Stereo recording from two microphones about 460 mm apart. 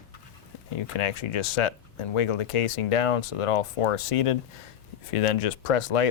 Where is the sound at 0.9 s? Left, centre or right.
Left.